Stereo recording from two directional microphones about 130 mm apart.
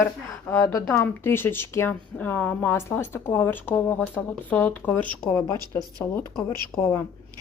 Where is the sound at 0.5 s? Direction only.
25° left (ahead or behind).